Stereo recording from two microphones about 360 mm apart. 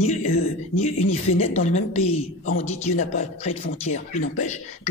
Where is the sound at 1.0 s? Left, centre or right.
Centre.